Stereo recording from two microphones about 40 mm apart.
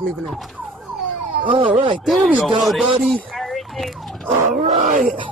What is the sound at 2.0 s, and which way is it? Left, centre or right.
Speech, centre.